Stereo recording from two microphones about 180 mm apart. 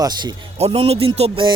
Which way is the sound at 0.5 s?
35° right (ahead or behind).